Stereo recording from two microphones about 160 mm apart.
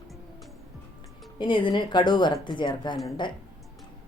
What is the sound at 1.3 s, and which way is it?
Speech, 30° left (ahead or behind).